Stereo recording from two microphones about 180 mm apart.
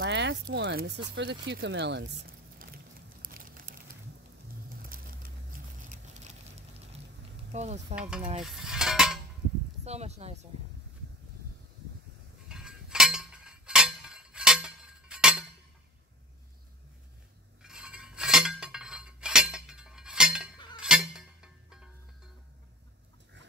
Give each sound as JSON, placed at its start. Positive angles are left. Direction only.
{"t": 0.0, "sound": "a sound", "side_deg": -80}
{"t": 0.7, "sound": "speech", "side_deg": -70}
{"t": 1.1, "sound": "speech", "side_deg": -80}
{"t": 2.6, "sound": "a sound", "side_deg": -50}
{"t": 4.8, "sound": "a sound", "side_deg": -50}
{"t": 7.5, "sound": "speech", "side_deg": -40}
{"t": 7.9, "sound": "stir", "side_deg": -5}
{"t": 8.4, "sound": "cutlery", "side_deg": 0}
{"t": 9.8, "sound": "speech", "side_deg": -35}
{"t": 12.4, "sound": "chink", "side_deg": -5}
{"t": 17.6, "sound": "chink", "side_deg": -5}
{"t": 20.8, "sound": "music", "side_deg": -5}